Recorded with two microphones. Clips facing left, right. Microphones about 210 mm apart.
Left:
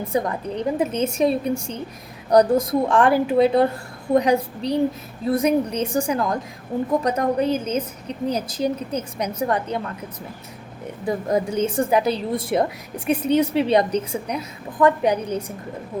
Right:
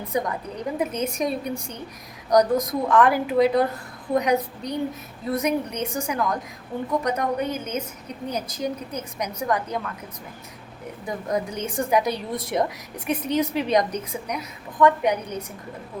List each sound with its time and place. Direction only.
0.1 s a woman's voice: 30° left (ahead or behind)
11.0 s a woman's voice: 30° left (ahead or behind)